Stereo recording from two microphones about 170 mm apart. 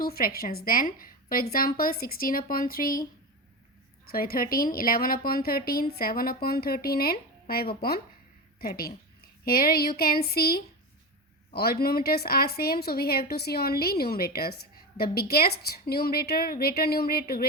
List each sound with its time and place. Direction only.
0.0 s a woman's voice: 60° left (ahead or behind)
4.1 s a woman's voice: 60° left (ahead or behind)